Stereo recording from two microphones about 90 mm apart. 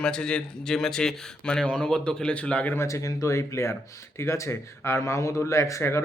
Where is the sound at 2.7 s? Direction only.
35° left (ahead or behind).